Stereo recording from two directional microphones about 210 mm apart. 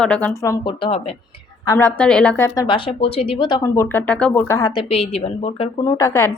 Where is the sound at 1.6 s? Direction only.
15° left (ahead or behind).